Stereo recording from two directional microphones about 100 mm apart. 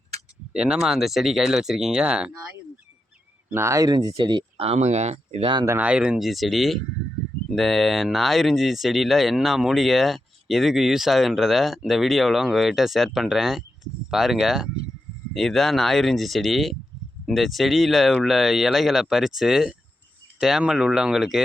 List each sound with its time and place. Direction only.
0.5 s speech: 10° right (ahead or behind)
3.5 s speech: 30° right (ahead or behind)
4.1 s speech: 55° right (ahead or behind)
4.6 s speech: 90° right
5.8 s speech: 10° right (ahead or behind)
6.2 s speech: centre (ahead or behind)